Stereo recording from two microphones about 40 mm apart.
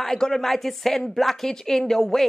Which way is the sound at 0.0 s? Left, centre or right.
Centre.